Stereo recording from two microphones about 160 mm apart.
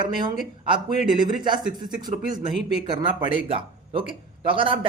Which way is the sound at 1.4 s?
25° right (ahead or behind).